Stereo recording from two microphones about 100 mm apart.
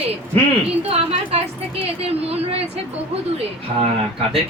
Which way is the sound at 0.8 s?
90° right.